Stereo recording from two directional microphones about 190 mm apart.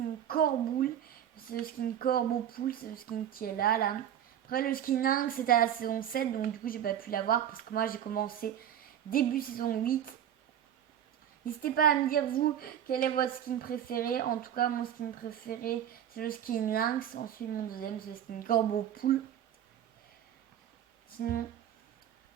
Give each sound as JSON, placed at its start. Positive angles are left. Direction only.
{"t": 0.3, "sound": "a woman's voice", "side_deg": 50}
{"t": 11.4, "sound": "a woman's voice", "side_deg": 50}
{"t": 21.2, "sound": "speech", "side_deg": 55}